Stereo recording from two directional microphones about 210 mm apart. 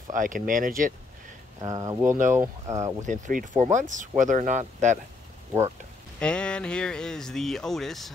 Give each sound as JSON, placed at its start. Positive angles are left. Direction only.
{"t": 0.1, "sound": "speech", "side_deg": -40}
{"t": 1.6, "sound": "speech", "side_deg": -15}
{"t": 3.1, "sound": "speech", "side_deg": -40}
{"t": 6.1, "sound": "speech", "side_deg": 5}